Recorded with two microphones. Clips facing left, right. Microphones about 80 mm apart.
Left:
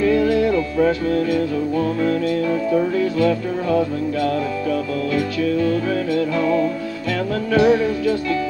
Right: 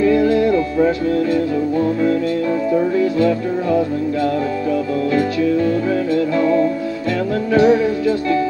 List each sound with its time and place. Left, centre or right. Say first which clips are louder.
0.3 s music: right 3 dB; right
3.2 s music: right 2 dB; right